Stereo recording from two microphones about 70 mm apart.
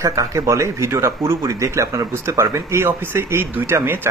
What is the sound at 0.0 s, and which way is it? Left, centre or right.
Speech, right.